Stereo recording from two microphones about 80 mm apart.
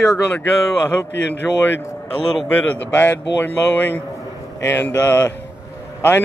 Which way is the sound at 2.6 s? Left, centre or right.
Left.